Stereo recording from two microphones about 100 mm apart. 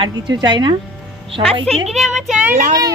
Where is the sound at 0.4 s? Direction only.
45° right (ahead or behind).